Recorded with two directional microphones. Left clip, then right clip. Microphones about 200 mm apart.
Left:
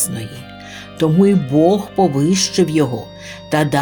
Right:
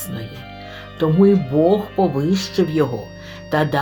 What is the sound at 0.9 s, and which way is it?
Speech, 45° left (ahead or behind).